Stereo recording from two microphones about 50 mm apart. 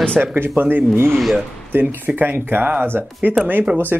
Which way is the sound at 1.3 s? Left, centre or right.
Right.